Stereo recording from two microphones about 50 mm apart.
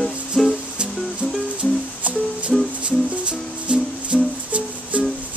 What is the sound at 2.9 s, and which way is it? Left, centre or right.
Music, right.